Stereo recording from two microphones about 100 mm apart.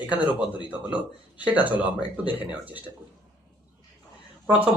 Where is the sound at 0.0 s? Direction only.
15° right (ahead or behind).